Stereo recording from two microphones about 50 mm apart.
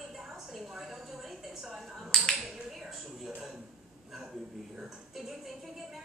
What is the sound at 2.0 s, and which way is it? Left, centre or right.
Finger snapping, centre.